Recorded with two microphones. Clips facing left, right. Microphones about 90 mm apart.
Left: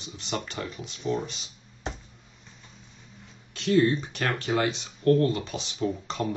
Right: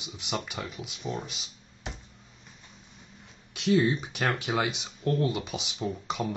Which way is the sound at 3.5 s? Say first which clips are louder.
Left 2 dB; 15° right (ahead or behind).